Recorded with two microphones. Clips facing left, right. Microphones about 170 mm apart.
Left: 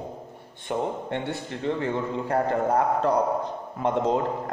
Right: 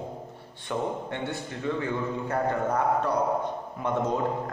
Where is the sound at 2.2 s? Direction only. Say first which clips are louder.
Left 4 dB; 35° left (ahead or behind).